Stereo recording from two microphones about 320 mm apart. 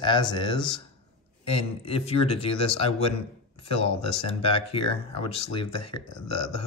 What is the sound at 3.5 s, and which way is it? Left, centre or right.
Speech, centre.